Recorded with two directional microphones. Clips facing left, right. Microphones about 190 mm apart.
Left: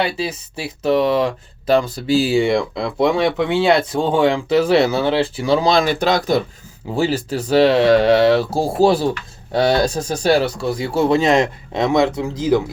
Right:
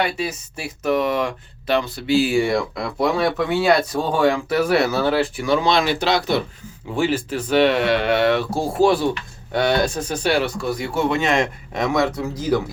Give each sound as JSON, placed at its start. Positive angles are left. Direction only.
{"t": 0.0, "sound": "speech", "side_deg": 30}
{"t": 2.3, "sound": "speech", "side_deg": 20}